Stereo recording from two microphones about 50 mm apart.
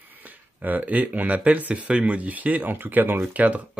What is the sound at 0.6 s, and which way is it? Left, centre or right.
Speech, right.